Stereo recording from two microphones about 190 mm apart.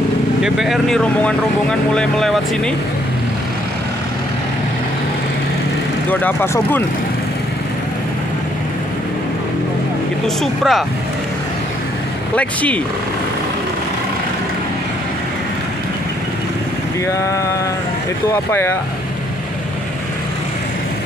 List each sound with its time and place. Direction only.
0.4 s speech: centre (ahead or behind)
6.0 s speech: 10° left (ahead or behind)
10.2 s speech: centre (ahead or behind)
12.4 s speech: 5° left (ahead or behind)
18.3 s speech: 10° left (ahead or behind)